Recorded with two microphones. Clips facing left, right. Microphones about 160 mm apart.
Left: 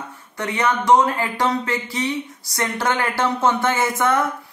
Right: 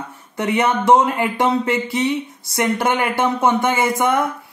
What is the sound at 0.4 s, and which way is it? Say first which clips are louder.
Speech: right 4 dB; 25° right (ahead or behind).